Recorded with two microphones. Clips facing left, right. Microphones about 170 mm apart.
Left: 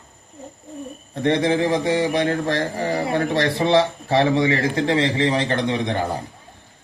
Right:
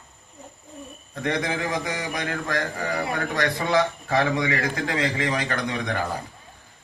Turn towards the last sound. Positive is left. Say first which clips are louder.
# left 5 dB
turn(degrees=25)  # may be behind; listen again after turning